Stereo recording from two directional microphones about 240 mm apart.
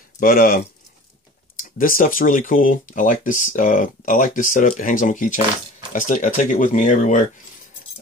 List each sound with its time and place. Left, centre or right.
0.2 s speech: left
1.6 s speech: left